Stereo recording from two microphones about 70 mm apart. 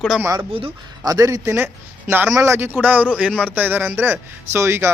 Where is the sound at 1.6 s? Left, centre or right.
Right.